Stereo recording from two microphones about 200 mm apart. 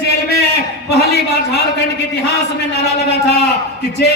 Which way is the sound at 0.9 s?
55° left (ahead or behind).